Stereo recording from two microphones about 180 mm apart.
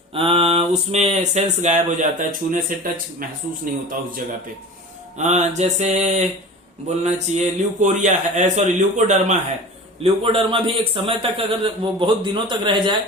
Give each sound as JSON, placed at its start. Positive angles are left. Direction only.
{"t": 0.1, "sound": "speech", "side_deg": -30}
{"t": 5.1, "sound": "speech", "side_deg": -40}
{"t": 10.0, "sound": "speech", "side_deg": -30}